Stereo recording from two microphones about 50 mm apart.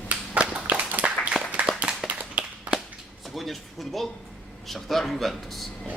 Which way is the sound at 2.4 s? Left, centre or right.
Right.